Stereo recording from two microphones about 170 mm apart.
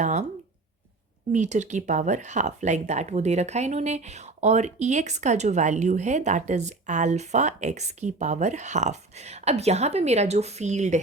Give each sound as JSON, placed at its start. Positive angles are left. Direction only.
{"t": 0.0, "sound": "speech", "side_deg": -40}
{"t": 1.3, "sound": "speech", "side_deg": -45}